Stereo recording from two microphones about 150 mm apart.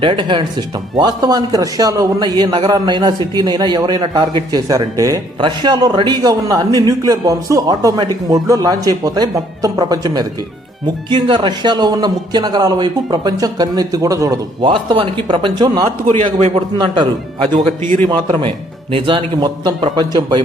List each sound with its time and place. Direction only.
0.0 s a man's voice: 35° right (ahead or behind)
18.1 s a man's voice: 35° right (ahead or behind)